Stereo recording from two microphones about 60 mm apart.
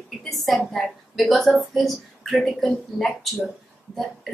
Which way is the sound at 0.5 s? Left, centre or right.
Centre.